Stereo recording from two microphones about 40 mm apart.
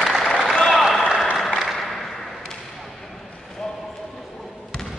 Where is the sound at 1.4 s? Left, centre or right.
Centre.